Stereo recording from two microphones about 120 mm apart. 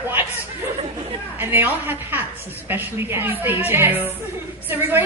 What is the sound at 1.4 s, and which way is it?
A woman's voice, 20° right (ahead or behind).